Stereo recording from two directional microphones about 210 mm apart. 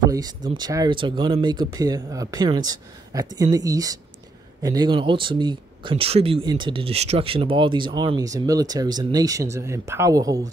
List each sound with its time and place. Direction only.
0.0 s speech: 20° right (ahead or behind)